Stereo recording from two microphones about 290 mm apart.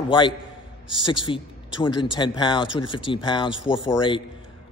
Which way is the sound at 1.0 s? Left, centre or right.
Centre.